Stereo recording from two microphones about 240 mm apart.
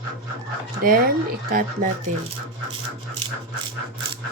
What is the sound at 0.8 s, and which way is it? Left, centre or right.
Speech, right.